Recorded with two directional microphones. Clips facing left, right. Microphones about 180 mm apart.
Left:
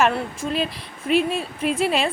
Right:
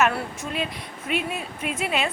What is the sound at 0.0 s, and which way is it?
A woman's voice, 30° left (ahead or behind).